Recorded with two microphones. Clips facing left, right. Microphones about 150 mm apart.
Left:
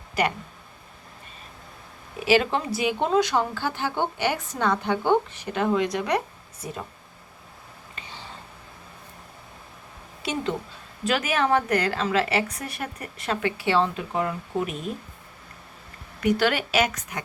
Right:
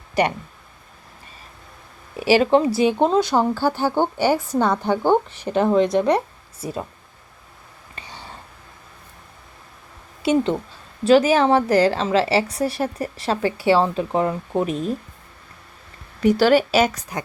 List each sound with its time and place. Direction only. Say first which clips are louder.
0.1 s speech: right 5 dB; 35° right (ahead or behind)
2.3 s a woman's voice: right 6 dB; 30° right (ahead or behind)
10.2 s a woman's voice: right 9 dB; 30° right (ahead or behind)
16.2 s a woman's voice: right 7 dB; 35° right (ahead or behind)